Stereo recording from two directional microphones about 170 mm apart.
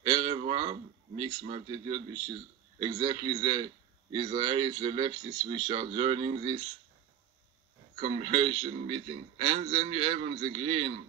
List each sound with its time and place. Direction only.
0.0 s a man's voice: 30° right (ahead or behind)
8.2 s a man's voice: 35° right (ahead or behind)